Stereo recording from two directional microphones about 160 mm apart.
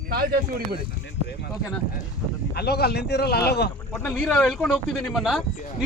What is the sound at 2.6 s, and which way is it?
Speech, 85° left.